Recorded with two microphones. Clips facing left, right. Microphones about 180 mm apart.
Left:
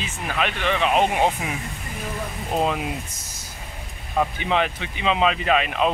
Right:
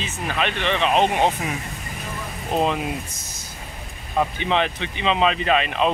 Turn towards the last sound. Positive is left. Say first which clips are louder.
# right 1 dB
turn(degrees=5)  # may be behind; listen again after turning